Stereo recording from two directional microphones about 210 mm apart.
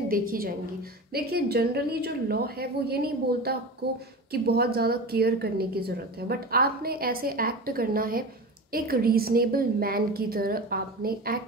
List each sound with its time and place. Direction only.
0.1 s a woman's voice: 45° right (ahead or behind)